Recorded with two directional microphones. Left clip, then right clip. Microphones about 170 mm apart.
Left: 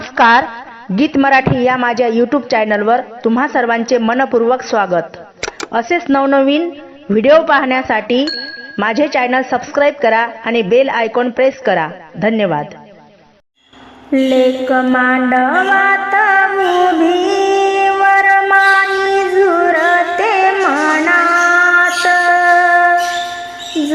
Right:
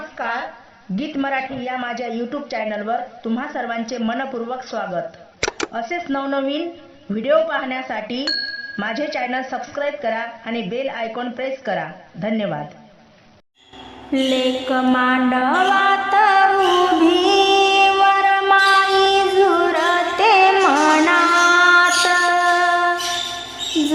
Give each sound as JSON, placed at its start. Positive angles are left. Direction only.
{"t": 0.9, "sound": "a woman's voice", "side_deg": 55}
{"t": 5.4, "sound": "a sound", "side_deg": 0}
{"t": 5.7, "sound": "a woman's voice", "side_deg": 50}
{"t": 8.2, "sound": "bicycle bell", "side_deg": 0}
{"t": 8.8, "sound": "a woman's voice", "side_deg": 55}
{"t": 14.1, "sound": "mantra", "side_deg": 30}
{"t": 16.1, "sound": "music", "side_deg": 10}
{"t": 16.6, "sound": "mantra", "side_deg": 20}
{"t": 17.2, "sound": "music", "side_deg": 5}
{"t": 19.7, "sound": "music", "side_deg": 15}